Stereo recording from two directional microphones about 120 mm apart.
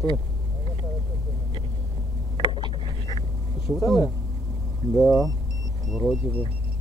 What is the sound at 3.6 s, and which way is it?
Speech, centre (ahead or behind).